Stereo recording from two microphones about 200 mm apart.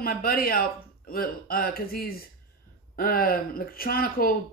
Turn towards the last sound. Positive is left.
turn(degrees=45)  # may be behind; listen again after turning